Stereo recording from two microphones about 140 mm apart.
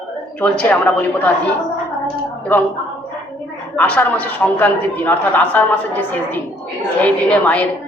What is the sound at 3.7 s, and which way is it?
A man's voice, 15° left (ahead or behind).